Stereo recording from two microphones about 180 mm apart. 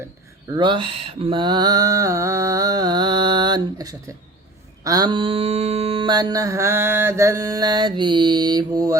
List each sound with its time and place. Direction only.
0.5 s mantra: 25° right (ahead or behind)